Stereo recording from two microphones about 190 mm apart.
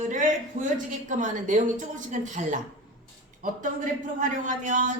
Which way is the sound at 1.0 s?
40° right (ahead or behind).